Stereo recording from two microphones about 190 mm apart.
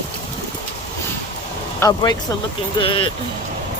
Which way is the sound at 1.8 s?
20° left (ahead or behind).